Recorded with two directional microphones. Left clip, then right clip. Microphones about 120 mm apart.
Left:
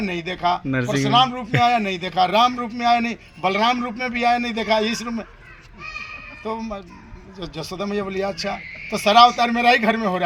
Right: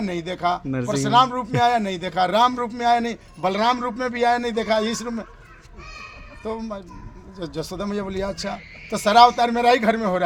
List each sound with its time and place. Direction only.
0.0 s a man's voice: 50° right (ahead or behind)
0.7 s speech: 5° left (ahead or behind)
1.1 s a man's voice: 50° right (ahead or behind)
6.4 s a man's voice: 50° right (ahead or behind)